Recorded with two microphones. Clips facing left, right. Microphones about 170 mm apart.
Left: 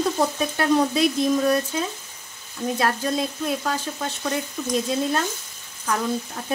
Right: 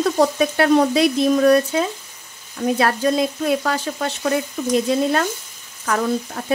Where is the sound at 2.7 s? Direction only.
70° right (ahead or behind).